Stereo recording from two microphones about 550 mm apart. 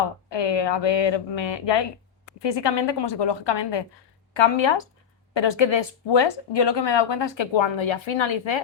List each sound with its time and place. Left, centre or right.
0.3 s speech: left